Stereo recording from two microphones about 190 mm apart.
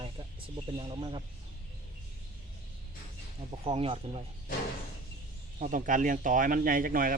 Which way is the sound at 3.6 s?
30° right (ahead or behind).